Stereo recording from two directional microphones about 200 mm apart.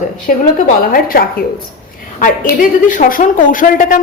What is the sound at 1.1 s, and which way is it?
Speech, 50° left (ahead or behind).